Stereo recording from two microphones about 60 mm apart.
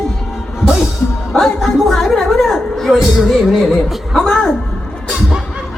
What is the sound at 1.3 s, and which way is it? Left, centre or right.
Music, centre.